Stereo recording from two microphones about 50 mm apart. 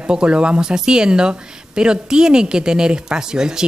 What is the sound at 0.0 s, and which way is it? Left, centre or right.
Speech, centre.